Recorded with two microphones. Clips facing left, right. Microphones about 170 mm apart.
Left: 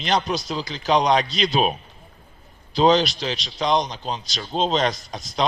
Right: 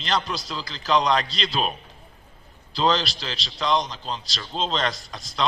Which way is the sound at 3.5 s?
45° left (ahead or behind).